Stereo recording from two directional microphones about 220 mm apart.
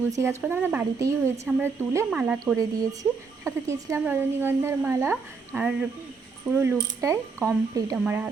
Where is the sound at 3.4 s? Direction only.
15° right (ahead or behind).